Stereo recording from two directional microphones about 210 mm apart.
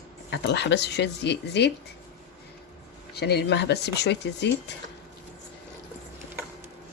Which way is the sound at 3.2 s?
55° left (ahead or behind).